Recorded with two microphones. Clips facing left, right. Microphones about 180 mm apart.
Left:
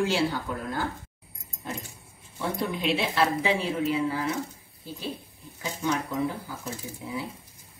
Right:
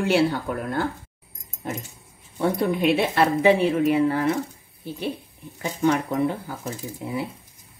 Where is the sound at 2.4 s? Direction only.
55° right (ahead or behind).